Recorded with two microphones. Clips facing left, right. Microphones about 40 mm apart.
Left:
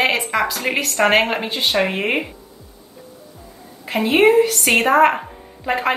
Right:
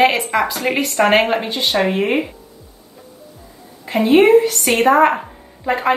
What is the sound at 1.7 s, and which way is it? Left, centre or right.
Speech, centre.